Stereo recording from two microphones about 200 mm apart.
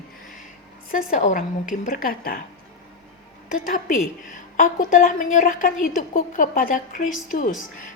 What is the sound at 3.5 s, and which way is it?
A woman's voice, 45° left (ahead or behind).